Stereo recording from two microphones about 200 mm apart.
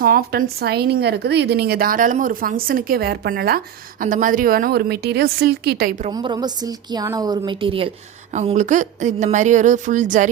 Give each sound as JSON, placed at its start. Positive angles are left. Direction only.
{"t": 0.0, "sound": "speech", "side_deg": -50}
{"t": 6.1, "sound": "a woman's voice", "side_deg": -20}